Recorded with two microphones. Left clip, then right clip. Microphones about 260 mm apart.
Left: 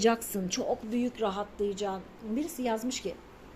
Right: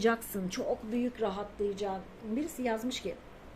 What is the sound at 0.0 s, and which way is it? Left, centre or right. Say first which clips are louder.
A woman's voice: left 3 dB; centre.